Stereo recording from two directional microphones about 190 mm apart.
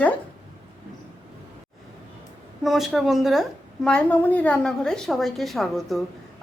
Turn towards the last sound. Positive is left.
turn(degrees=0)  # may be behind; listen again after turning